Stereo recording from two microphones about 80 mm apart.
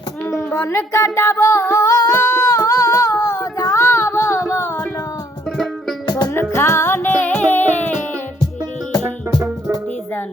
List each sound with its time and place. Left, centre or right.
0.5 s music: left
6.1 s music: left
6.3 s music: left